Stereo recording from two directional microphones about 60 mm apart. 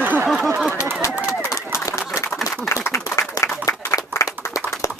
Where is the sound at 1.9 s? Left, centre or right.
Left.